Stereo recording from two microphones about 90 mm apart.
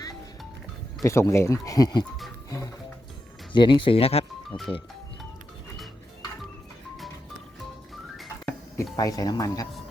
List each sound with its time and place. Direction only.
1.0 s speech: 30° left (ahead or behind); by 2.0 s 50° left (ahead or behind)
3.5 s speech: 60° left (ahead or behind); by 4.3 s 90° left
4.5 s speech: 65° left (ahead or behind)
8.8 s speech: 40° left (ahead or behind)